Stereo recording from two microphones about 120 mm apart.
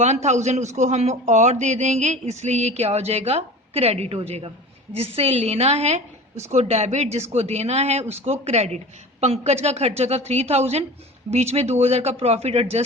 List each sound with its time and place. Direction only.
0.0 s a woman's voice: 75° right (ahead or behind)